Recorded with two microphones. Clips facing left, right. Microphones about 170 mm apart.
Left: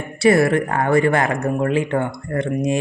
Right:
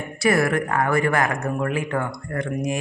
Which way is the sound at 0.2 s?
30° left (ahead or behind).